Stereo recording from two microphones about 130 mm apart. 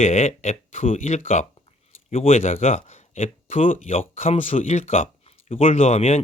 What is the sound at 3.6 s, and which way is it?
Speech, 90° left.